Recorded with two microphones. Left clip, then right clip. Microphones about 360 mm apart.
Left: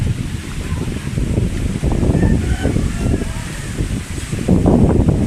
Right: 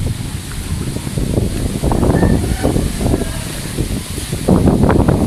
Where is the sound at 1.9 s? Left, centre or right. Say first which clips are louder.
Right 4 dB; right.